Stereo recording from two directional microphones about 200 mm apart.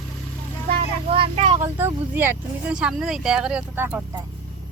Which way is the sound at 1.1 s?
30° right (ahead or behind).